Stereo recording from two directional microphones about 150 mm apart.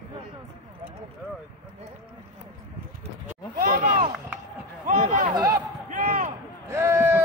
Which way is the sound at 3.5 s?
70° right (ahead or behind).